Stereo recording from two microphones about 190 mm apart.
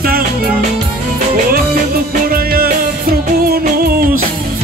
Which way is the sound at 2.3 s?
50° right (ahead or behind).